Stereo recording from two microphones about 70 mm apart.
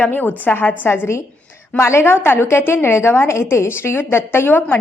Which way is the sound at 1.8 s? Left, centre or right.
Left.